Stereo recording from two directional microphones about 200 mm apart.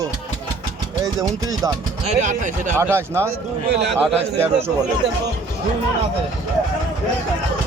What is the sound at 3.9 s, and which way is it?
Speech, centre (ahead or behind).